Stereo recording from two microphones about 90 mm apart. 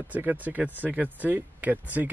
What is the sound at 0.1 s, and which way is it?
Speech, 20° right (ahead or behind).